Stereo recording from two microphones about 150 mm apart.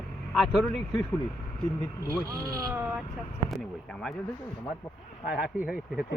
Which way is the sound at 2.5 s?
25° right (ahead or behind).